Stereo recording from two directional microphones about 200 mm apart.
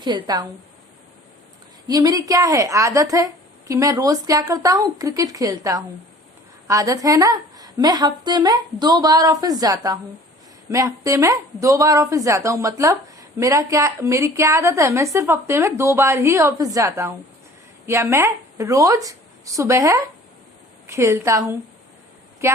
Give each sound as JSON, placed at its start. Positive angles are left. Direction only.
{"t": 0.0, "sound": "a woman's voice", "side_deg": -20}
{"t": 1.9, "sound": "a woman's voice", "side_deg": -20}